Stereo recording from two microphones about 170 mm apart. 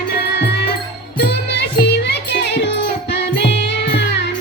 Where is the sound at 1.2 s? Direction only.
75° left (ahead or behind).